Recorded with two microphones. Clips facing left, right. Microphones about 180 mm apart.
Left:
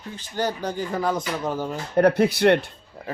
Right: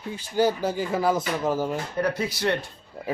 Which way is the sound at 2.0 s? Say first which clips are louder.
Left 10 dB; 60° left (ahead or behind).